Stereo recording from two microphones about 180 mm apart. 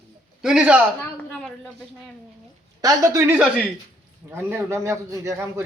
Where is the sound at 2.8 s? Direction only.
20° right (ahead or behind).